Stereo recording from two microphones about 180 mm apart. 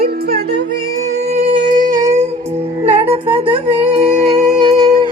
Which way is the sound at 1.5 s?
45° right (ahead or behind).